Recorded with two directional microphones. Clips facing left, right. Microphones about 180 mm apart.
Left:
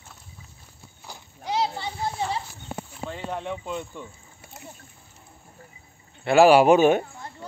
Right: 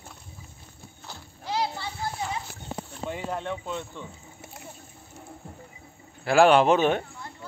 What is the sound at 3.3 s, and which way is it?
Speech, centre (ahead or behind).